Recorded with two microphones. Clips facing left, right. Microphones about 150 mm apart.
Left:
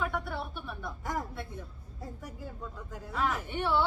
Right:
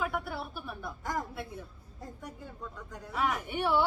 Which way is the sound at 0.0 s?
5° right (ahead or behind).